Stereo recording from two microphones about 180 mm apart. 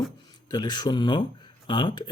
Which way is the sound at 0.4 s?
25° left (ahead or behind).